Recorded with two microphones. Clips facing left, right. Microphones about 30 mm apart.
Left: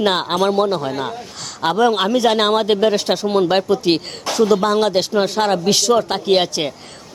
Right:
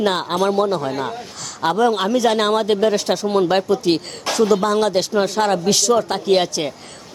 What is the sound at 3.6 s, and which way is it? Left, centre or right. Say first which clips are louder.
Speech: left 1 dB; left.